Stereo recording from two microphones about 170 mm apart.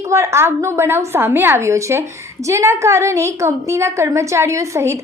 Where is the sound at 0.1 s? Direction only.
15° right (ahead or behind).